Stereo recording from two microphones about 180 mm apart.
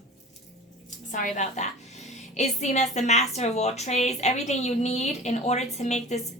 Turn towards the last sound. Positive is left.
turn(degrees=40)  # may be behind; listen again after turning